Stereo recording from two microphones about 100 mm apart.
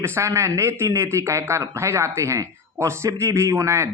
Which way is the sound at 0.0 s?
25° right (ahead or behind).